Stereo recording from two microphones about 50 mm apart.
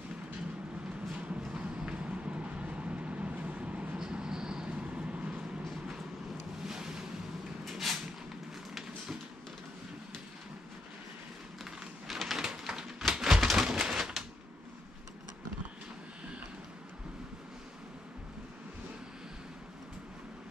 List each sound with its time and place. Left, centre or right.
1.5 s vehicle: centre
4.0 s vehicle: centre
6.6 s ocean: centre
7.6 s a sound: centre
12.1 s a sound: centre
12.4 s typewriter: centre